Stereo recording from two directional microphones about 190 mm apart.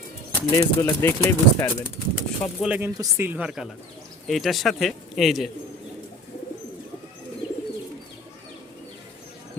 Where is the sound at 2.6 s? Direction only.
10° right (ahead or behind).